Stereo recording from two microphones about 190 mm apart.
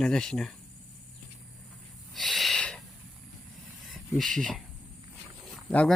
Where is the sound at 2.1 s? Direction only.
Centre (ahead or behind).